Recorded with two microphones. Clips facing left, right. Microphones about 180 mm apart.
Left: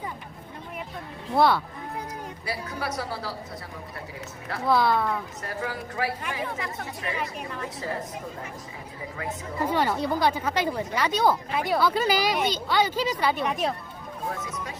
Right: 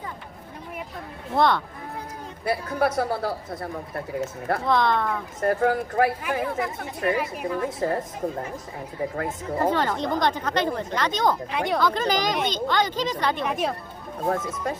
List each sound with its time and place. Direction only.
1.4 s speech: 5° left (ahead or behind)
2.4 s a woman's voice: 55° right (ahead or behind)
4.6 s speech: 5° left (ahead or behind)
5.4 s a woman's voice: 50° right (ahead or behind)
9.1 s a woman's voice: 50° right (ahead or behind)
9.7 s speech: 10° left (ahead or behind)
14.3 s a woman's voice: 50° right (ahead or behind)